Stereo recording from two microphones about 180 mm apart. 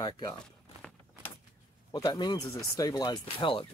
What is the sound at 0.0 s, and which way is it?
Speech, 20° left (ahead or behind).